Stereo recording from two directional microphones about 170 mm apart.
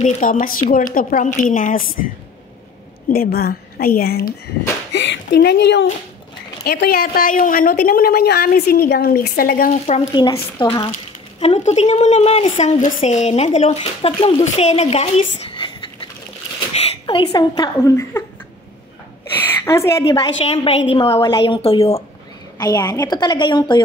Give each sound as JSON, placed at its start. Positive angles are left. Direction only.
{"t": 0.0, "sound": "a woman's voice", "side_deg": 55}
{"t": 3.1, "sound": "a woman's voice", "side_deg": 65}
{"t": 4.9, "sound": "speech", "side_deg": 90}
{"t": 6.6, "sound": "a woman's voice", "side_deg": 70}
{"t": 10.1, "sound": "a woman's voice", "side_deg": 25}
{"t": 10.9, "sound": "speech", "side_deg": 40}
{"t": 19.4, "sound": "a woman's voice", "side_deg": 15}
{"t": 20.5, "sound": "speech", "side_deg": 35}
{"t": 22.6, "sound": "a woman's voice", "side_deg": 20}